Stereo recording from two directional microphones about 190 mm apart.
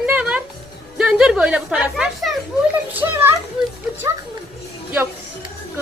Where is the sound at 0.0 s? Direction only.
5° right (ahead or behind).